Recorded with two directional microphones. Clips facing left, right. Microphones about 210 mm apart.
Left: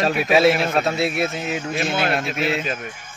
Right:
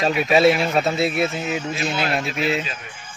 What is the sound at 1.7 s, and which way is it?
Speech, 50° left (ahead or behind).